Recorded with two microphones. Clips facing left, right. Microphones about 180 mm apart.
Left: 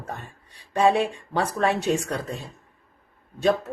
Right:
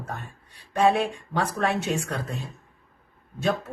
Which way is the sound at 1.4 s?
35° left (ahead or behind).